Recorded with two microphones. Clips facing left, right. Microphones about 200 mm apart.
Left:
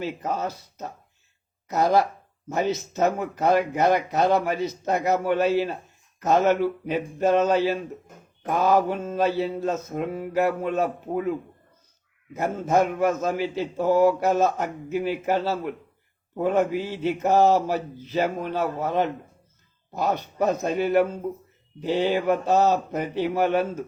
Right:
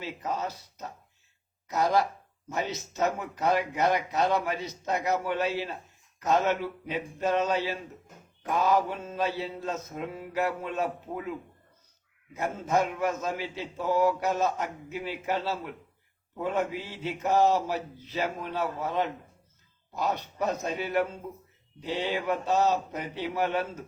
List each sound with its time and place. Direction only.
0.0 s a man's voice: 50° left (ahead or behind)
1.8 s a man's voice: 45° left (ahead or behind)
12.4 s a man's voice: 50° left (ahead or behind)